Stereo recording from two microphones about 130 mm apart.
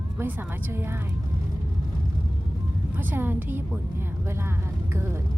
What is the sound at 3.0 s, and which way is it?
A woman's voice, 15° right (ahead or behind).